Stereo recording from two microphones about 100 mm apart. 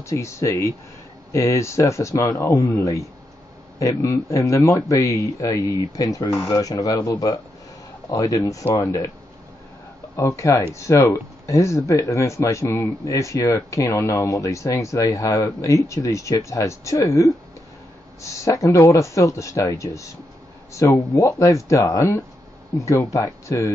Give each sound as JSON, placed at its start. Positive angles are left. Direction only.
{"t": 0.0, "sound": "speech", "side_deg": 30}
{"t": 10.1, "sound": "speech", "side_deg": 30}